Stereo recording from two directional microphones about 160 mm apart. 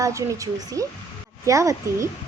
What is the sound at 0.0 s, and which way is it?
A woman's voice, 20° right (ahead or behind).